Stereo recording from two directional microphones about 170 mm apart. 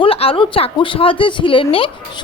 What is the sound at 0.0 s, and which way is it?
A woman's voice, 35° left (ahead or behind).